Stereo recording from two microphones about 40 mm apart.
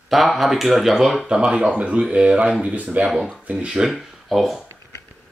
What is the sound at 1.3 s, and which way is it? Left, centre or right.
Speech, right.